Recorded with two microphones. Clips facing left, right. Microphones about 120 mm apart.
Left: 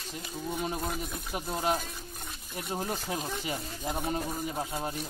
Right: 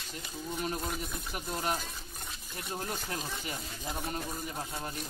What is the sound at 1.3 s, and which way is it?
A man's voice, 20° left (ahead or behind).